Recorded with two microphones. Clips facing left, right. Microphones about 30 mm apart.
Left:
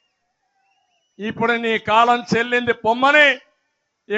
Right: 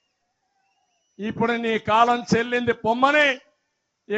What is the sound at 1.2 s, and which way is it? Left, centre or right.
Speech, left.